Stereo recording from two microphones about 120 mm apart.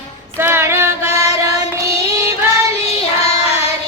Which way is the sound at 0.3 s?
20° right (ahead or behind).